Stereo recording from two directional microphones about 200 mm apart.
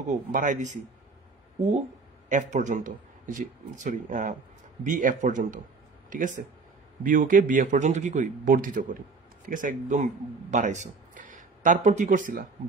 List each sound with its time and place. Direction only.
0.1 s a man's voice: 40° right (ahead or behind)
2.2 s a man's voice: 40° right (ahead or behind)